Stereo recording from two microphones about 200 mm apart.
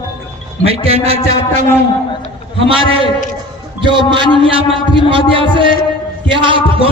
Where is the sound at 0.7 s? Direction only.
30° right (ahead or behind).